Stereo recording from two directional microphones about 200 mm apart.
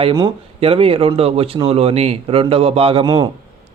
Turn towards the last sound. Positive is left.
turn(degrees=-25)  # may be behind; listen again after turning